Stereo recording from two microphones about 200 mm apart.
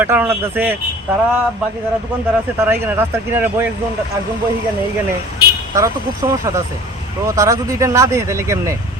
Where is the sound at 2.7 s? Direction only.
10° right (ahead or behind).